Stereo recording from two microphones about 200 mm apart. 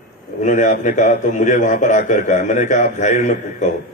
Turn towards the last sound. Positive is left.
turn(degrees=35)  # may be behind; listen again after turning